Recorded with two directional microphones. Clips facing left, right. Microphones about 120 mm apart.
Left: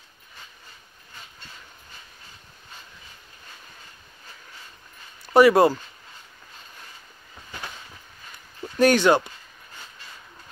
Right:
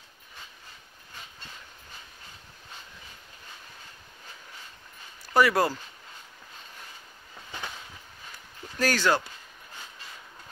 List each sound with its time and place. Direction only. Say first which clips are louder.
5.2 s speech: left 8 dB; 25° left (ahead or behind)
8.7 s speech: left 7 dB; 20° left (ahead or behind)